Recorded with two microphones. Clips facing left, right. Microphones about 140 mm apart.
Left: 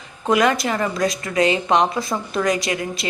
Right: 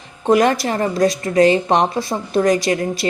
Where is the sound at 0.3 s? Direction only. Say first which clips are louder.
Right 3 dB; 40° right (ahead or behind).